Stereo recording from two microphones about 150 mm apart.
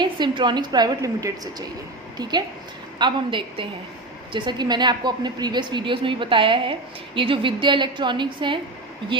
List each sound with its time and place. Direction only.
0.0 s a woman's voice: 30° right (ahead or behind)